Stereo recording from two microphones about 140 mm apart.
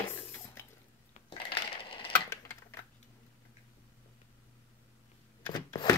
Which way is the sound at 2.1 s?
15° left (ahead or behind).